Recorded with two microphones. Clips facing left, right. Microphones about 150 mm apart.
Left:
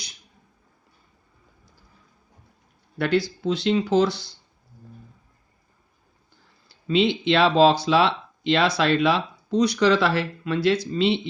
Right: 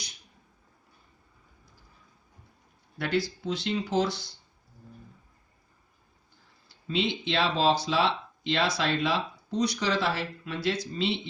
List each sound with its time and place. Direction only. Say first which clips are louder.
3.0 s speech: left 6 dB; 80° left
6.8 s speech: left 9 dB; 80° left